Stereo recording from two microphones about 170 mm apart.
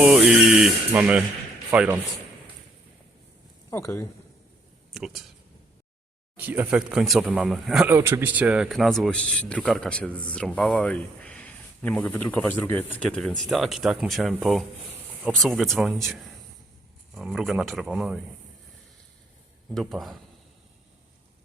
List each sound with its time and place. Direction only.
0.0 s a sound: 5° right (ahead or behind)
3.7 s speech: 15° left (ahead or behind)
4.9 s speech: centre (ahead or behind)
6.3 s speech: 10° right (ahead or behind)
7.9 s speech: 15° right (ahead or behind)
19.7 s speech: centre (ahead or behind)